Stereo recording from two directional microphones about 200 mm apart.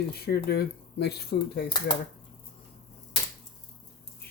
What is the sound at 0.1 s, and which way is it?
Speech, 50° left (ahead or behind).